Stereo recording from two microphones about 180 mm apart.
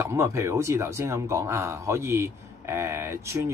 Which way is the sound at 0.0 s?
15° right (ahead or behind).